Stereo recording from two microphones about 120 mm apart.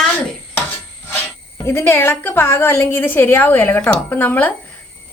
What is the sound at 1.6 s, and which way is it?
A woman's voice, 20° left (ahead or behind).